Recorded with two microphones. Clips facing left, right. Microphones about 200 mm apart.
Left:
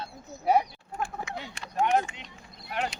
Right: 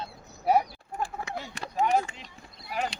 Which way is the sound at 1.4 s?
40° right (ahead or behind).